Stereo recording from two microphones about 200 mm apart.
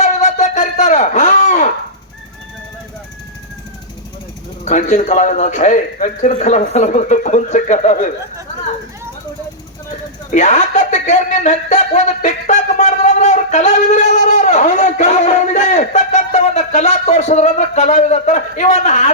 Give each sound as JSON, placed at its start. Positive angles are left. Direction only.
{"t": 0.0, "sound": "a sound", "side_deg": 35}
{"t": 4.6, "sound": "a man's voice", "side_deg": 35}
{"t": 10.3, "sound": "speech", "side_deg": 35}